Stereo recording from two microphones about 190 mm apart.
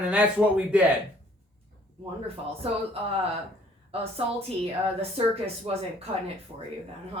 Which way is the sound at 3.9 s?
30° right (ahead or behind).